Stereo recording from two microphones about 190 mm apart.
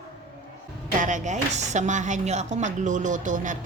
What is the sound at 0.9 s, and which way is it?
A woman's voice, 40° right (ahead or behind).